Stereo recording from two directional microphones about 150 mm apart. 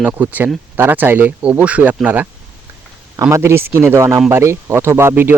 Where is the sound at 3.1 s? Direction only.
20° right (ahead or behind).